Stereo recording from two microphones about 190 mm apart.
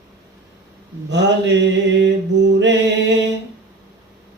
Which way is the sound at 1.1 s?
65° right (ahead or behind).